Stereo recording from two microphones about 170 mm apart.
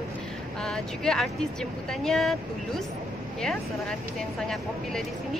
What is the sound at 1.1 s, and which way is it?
A woman's voice, centre (ahead or behind).